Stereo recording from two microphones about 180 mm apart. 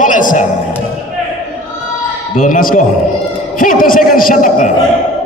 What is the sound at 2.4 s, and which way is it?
A man's voice, 50° left (ahead or behind).